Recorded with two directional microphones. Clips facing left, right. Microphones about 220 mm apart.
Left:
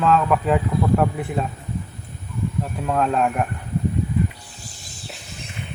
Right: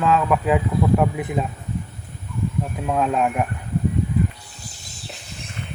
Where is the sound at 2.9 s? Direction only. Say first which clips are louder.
Even; 5° right (ahead or behind).